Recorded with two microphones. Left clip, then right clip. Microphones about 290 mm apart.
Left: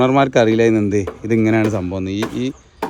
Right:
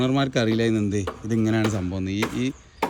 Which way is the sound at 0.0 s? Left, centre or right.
Left.